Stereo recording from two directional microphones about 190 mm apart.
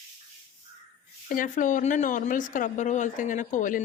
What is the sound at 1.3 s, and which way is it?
Speech, 45° left (ahead or behind).